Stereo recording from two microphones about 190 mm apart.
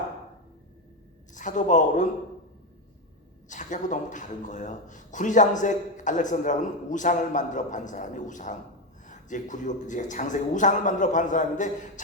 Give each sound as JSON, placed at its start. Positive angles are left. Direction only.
{"t": 1.3, "sound": "a man's voice", "side_deg": 40}
{"t": 3.5, "sound": "speech", "side_deg": 40}